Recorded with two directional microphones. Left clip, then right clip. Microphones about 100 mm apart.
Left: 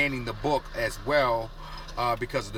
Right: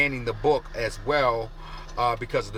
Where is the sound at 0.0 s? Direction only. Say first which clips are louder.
Right 4 dB; 30° right (ahead or behind).